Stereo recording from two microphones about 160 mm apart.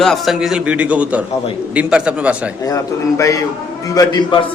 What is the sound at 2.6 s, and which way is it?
A man's voice, 20° left (ahead or behind).